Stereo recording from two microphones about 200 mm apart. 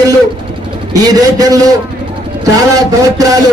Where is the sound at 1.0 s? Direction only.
20° right (ahead or behind).